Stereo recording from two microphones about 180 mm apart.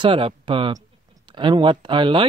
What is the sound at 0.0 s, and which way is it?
Speech, 30° right (ahead or behind).